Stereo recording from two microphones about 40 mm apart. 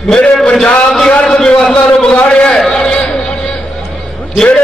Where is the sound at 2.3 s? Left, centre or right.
Centre.